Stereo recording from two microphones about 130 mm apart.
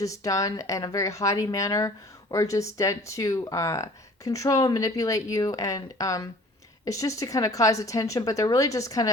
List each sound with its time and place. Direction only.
0.0 s speech: 25° left (ahead or behind)